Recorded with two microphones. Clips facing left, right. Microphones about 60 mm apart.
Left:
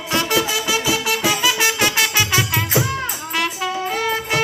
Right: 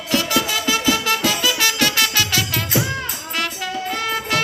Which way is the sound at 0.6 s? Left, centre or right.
Centre.